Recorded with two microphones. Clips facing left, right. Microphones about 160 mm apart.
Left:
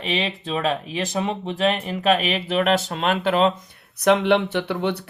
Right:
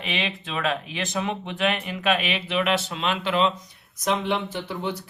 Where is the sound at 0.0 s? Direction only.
35° left (ahead or behind).